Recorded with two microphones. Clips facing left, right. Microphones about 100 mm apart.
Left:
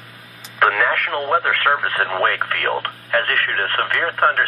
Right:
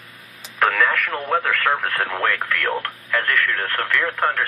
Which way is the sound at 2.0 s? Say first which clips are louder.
Left 3 dB; 40° left (ahead or behind).